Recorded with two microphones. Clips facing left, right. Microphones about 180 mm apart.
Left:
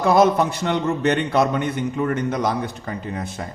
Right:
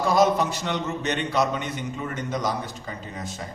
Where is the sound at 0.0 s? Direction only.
55° left (ahead or behind).